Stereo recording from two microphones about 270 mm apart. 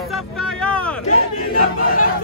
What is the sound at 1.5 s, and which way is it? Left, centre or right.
Crowd, left.